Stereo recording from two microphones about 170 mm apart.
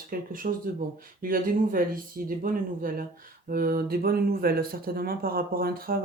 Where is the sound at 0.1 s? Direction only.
55° right (ahead or behind).